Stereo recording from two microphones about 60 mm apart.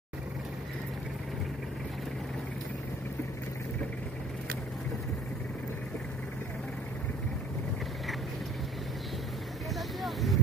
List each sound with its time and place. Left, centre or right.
9.8 s vehicle: centre